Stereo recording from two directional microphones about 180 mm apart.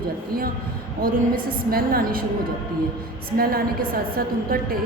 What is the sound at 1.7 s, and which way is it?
Speech, 55° right (ahead or behind).